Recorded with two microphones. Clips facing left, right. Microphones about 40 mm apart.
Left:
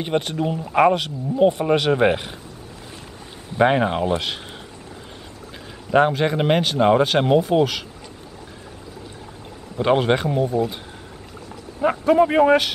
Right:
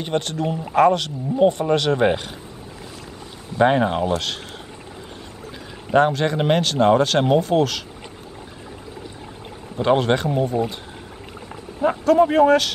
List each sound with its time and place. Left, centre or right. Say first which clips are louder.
0.0 s speech: left 1 dB; centre
3.5 s speech: even; centre
6.0 s speech: even; centre
9.8 s speech: even; centre
10.5 s speech: left 1 dB; right
11.8 s speech: even; centre